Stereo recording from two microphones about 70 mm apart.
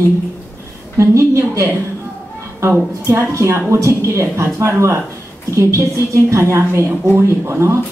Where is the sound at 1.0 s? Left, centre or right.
Right.